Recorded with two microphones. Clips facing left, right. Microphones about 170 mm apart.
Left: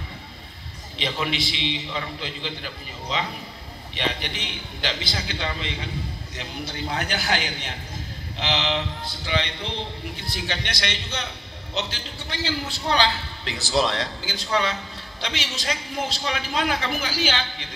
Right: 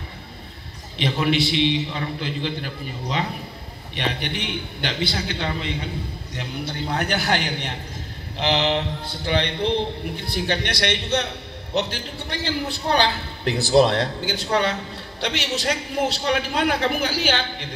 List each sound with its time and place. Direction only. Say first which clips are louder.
0.9 s a man's voice: right 6 dB; 55° right (ahead or behind)